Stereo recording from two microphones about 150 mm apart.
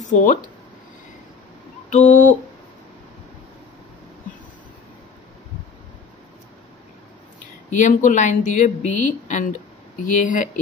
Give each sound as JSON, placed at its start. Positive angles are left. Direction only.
{"t": 0.0, "sound": "speech", "side_deg": 60}
{"t": 1.9, "sound": "speech", "side_deg": 55}
{"t": 7.7, "sound": "speech", "side_deg": 55}